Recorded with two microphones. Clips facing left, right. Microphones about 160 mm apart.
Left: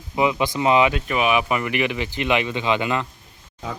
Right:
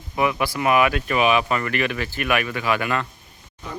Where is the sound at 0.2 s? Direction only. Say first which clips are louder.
Left 2 dB; 20° left (ahead or behind).